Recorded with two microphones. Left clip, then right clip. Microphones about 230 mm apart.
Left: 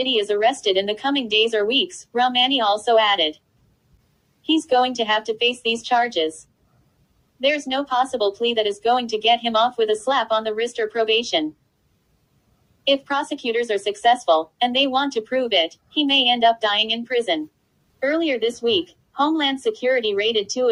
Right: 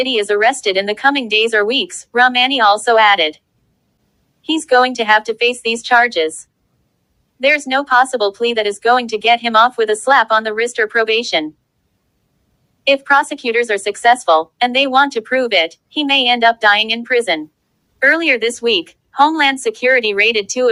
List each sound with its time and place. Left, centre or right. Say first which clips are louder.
0.0 s speech: right 5 dB; right
4.5 s speech: right 6 dB; right
7.3 s a woman's voice: right 7 dB; right
12.8 s speech: right 8 dB; right
18.6 s a woman's voice: right 5 dB; right
19.2 s speech: right 8 dB; right